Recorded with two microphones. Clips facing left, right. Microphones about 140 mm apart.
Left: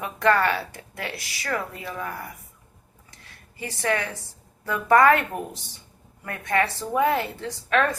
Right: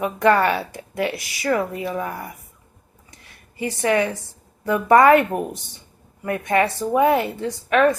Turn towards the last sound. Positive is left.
turn(degrees=-10)  # may be behind; listen again after turning